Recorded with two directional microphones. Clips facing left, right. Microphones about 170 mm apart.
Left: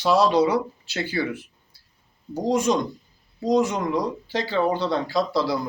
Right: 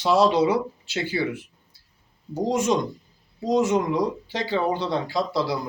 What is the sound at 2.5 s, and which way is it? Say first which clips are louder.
Speech: left 2 dB; 25° right (ahead or behind).